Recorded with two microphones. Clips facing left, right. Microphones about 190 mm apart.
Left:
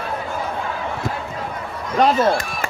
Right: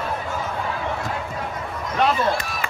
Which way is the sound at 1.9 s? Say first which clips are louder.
Left 5 dB; 40° left (ahead or behind).